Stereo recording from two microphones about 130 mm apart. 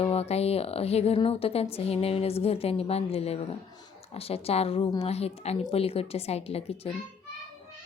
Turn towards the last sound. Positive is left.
turn(degrees=50)  # may be behind; listen again after turning